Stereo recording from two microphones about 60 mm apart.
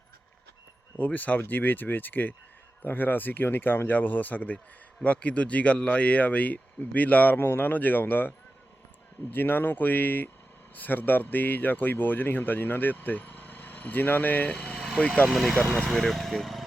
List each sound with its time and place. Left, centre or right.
0.9 s speech: left
7.3 s speech: left
9.3 s speech: left
14.5 s speech: centre
14.8 s vehicle: centre
15.3 s speech: centre